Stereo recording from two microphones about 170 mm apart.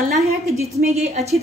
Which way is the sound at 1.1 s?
40° right (ahead or behind).